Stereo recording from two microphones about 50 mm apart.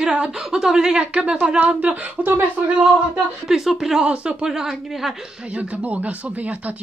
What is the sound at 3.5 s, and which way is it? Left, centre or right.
Speech, centre.